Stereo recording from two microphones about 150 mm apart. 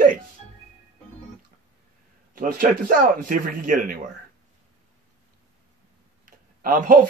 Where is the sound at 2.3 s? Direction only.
70° right (ahead or behind).